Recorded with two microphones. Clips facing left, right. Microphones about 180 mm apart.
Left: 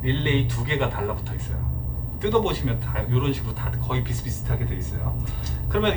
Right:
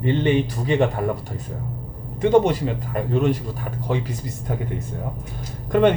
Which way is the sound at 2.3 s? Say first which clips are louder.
Right 5 dB; 45° right (ahead or behind).